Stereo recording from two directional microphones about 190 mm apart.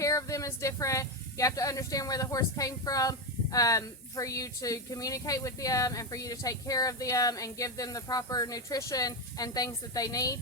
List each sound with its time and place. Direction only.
0.0 s speech: 15° left (ahead or behind)